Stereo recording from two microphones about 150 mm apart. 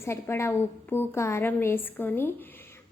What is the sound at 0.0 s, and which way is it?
A woman's voice, 20° left (ahead or behind).